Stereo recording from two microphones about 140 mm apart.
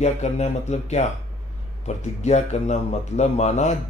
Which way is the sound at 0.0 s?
50° left (ahead or behind).